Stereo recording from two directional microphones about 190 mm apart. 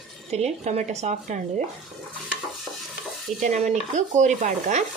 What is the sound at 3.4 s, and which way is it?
Speech, 40° right (ahead or behind).